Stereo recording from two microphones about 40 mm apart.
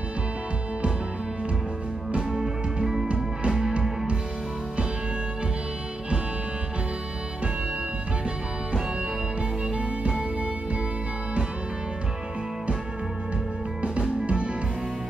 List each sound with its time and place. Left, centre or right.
2.1 s music: centre
14.2 s music: right